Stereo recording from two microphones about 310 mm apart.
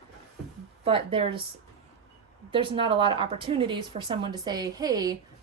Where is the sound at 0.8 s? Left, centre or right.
Centre.